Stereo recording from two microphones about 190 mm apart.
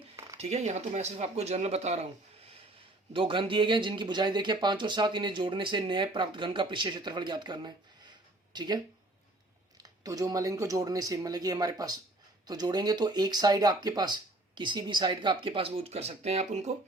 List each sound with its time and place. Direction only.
0.3 s speech: 35° right (ahead or behind)
3.1 s speech: 25° right (ahead or behind)